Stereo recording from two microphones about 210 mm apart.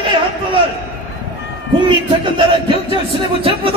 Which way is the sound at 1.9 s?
25° right (ahead or behind).